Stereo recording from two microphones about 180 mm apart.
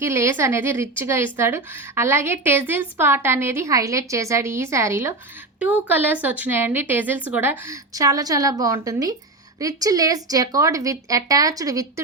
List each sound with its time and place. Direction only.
0.0 s a woman's voice: 15° right (ahead or behind)